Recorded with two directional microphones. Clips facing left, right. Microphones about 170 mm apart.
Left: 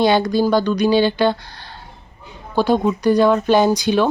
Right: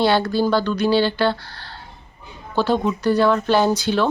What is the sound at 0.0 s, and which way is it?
Speech, 15° left (ahead or behind).